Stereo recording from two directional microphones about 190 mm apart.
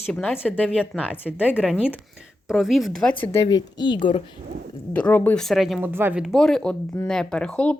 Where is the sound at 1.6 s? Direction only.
5° right (ahead or behind).